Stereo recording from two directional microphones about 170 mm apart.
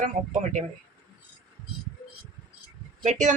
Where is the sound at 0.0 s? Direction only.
45° right (ahead or behind).